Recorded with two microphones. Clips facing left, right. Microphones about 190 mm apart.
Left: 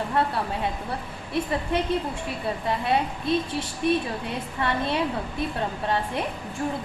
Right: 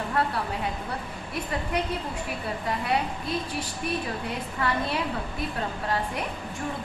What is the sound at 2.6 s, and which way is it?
A woman's voice, 25° left (ahead or behind).